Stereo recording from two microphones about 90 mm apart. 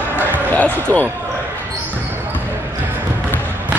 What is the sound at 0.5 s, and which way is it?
Basketball bounce, 15° left (ahead or behind).